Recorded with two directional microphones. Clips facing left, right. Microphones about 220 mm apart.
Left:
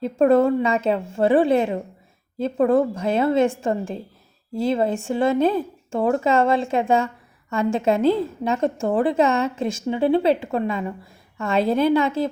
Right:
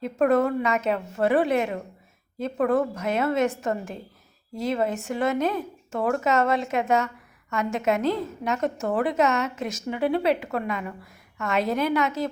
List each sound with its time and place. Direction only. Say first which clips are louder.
0.0 s a woman's voice: left 5 dB; 30° left (ahead or behind)